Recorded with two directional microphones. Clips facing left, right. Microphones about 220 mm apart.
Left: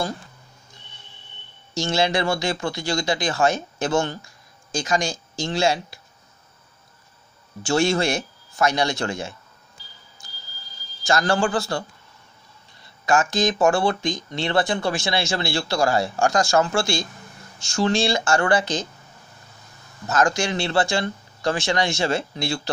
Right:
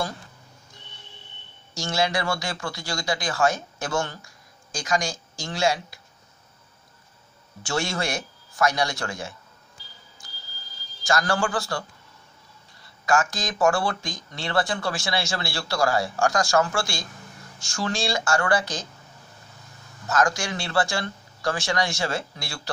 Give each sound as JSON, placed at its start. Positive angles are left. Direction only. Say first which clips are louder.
{"t": 1.7, "sound": "speech", "louder": "left 4 dB", "side_deg": 25}
{"t": 7.6, "sound": "speech", "louder": "left 7 dB", "side_deg": 25}
{"t": 11.1, "sound": "speech", "louder": "left 3 dB", "side_deg": 25}
{"t": 12.8, "sound": "speech", "louder": "left 2 dB", "side_deg": 20}
{"t": 20.1, "sound": "speech", "louder": "left 3 dB", "side_deg": 25}